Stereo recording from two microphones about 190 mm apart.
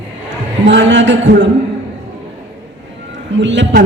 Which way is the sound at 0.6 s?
70° right (ahead or behind).